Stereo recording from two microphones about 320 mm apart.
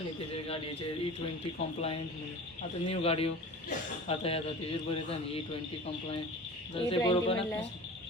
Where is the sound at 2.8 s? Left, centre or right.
Centre.